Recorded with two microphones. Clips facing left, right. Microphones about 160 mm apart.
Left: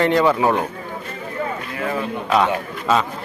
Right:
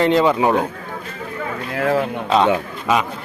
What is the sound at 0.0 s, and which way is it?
Speech, 20° right (ahead or behind).